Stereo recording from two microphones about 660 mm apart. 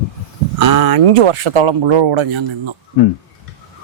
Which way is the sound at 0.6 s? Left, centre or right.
Right.